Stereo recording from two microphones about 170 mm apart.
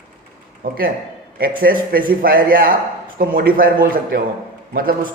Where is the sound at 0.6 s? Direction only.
55° right (ahead or behind).